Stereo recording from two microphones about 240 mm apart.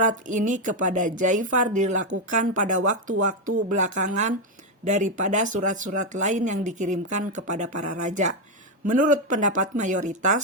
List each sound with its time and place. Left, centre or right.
0.0 s speech: right